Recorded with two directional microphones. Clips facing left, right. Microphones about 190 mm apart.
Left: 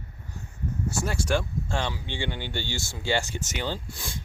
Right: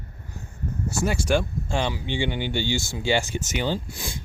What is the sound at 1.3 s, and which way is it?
Speech, 20° right (ahead or behind).